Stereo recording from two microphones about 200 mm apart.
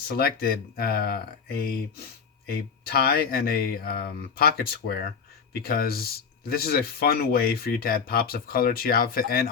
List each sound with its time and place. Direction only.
0.2 s speech: 50° left (ahead or behind)